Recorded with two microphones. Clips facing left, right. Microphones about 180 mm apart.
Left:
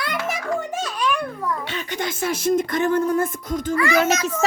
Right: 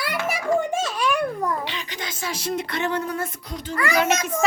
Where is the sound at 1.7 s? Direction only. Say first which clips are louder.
Left 6 dB; 50° left (ahead or behind).